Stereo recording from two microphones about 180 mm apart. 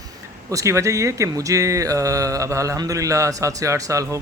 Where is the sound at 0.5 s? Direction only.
15° right (ahead or behind).